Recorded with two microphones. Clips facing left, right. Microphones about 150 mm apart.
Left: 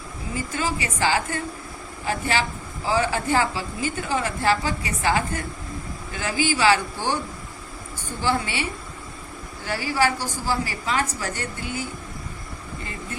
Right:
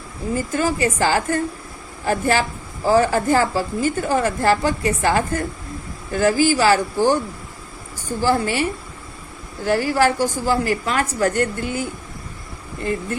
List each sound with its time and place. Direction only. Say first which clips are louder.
0.3 s a woman's voice: right 6 dB; 45° right (ahead or behind)
8.2 s a woman's voice: right 6 dB; 45° right (ahead or behind)
9.6 s a woman's voice: right 6 dB; 50° right (ahead or behind)